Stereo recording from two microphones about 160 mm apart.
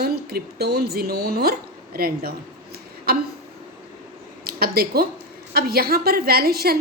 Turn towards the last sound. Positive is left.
turn(degrees=-75)  # may be behind; listen again after turning